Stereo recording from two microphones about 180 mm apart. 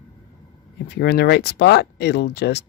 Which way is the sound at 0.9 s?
65° left (ahead or behind).